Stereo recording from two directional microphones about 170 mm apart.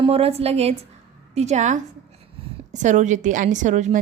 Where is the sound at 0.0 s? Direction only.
35° right (ahead or behind).